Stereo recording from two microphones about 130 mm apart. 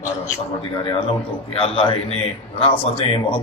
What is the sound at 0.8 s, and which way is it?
A man's voice, 45° left (ahead or behind).